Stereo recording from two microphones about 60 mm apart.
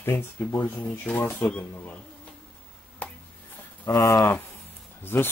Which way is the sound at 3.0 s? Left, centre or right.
Left.